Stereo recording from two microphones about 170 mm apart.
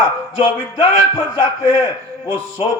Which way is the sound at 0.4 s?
35° left (ahead or behind).